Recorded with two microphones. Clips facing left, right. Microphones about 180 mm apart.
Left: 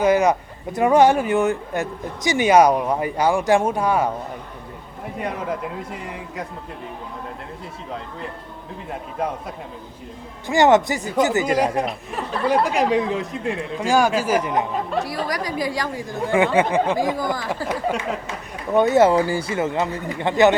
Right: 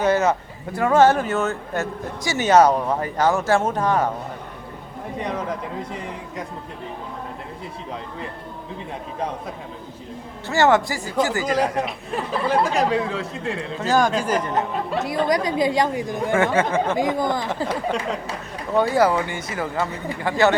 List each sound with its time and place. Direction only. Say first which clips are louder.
0.0 s speech: left 2 dB; 15° left (ahead or behind)
10.4 s speech: left 2 dB; 15° left (ahead or behind)
11.9 s speech: right 1 dB; centre (ahead or behind)
12.5 s speech: left 2 dB; 15° left (ahead or behind)
14.9 s speech: right 6 dB; 20° right (ahead or behind)
16.3 s speech: left 2 dB; 15° left (ahead or behind)
17.0 s speech: right 1 dB; 20° right (ahead or behind)
18.7 s speech: left 3 dB; 20° left (ahead or behind)